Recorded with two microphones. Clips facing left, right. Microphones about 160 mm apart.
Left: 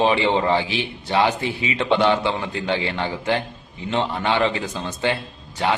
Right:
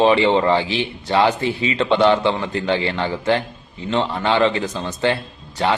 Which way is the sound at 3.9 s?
15° left (ahead or behind).